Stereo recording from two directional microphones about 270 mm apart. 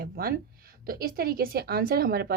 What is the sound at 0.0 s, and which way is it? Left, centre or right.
Speech, right.